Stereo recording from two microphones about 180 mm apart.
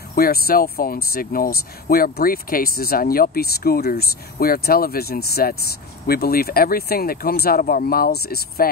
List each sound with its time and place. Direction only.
0.1 s speech: 55° left (ahead or behind)